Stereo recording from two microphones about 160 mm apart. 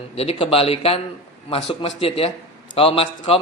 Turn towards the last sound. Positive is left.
turn(degrees=35)  # may be behind; listen again after turning